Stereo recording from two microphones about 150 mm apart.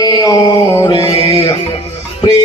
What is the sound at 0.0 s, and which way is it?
Music, 25° left (ahead or behind).